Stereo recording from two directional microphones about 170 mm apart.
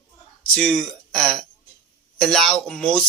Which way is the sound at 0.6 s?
Centre (ahead or behind).